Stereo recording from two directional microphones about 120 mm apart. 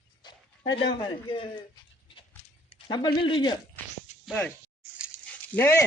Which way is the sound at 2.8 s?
40° left (ahead or behind).